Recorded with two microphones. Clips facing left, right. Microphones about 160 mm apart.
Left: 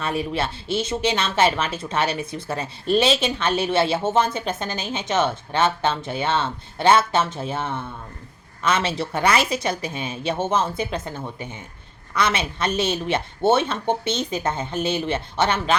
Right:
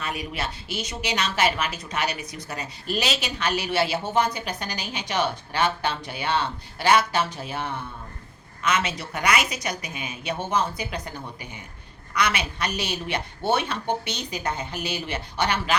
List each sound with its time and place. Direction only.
0.0 s speech: 30° left (ahead or behind)